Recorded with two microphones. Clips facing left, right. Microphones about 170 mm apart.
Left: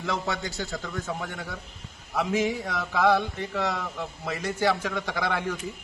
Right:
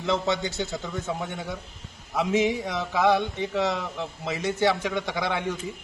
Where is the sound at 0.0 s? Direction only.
20° right (ahead or behind).